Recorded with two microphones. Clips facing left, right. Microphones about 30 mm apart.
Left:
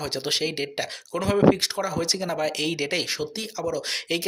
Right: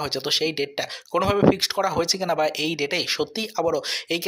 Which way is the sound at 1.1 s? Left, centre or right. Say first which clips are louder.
Right 1 dB; centre.